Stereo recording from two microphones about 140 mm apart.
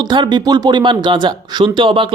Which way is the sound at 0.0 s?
30° right (ahead or behind).